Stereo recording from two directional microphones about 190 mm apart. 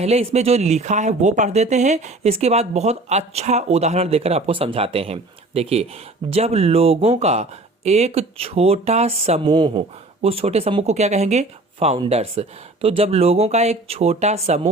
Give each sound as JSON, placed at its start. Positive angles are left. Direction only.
{"t": 0.0, "sound": "speech", "side_deg": -35}